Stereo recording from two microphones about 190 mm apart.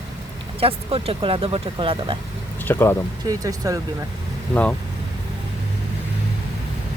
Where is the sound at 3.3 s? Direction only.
15° right (ahead or behind).